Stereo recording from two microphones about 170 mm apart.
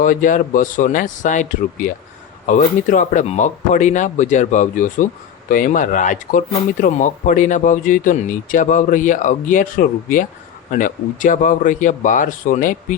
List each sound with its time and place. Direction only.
0.0 s speech: 50° left (ahead or behind)